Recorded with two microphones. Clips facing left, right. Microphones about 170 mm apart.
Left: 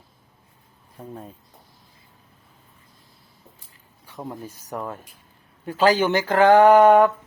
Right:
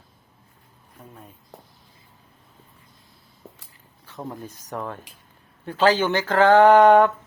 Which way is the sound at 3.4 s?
75° right (ahead or behind).